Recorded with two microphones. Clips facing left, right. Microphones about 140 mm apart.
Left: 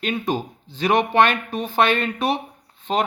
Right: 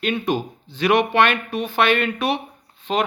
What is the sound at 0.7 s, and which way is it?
Speech, 40° left (ahead or behind).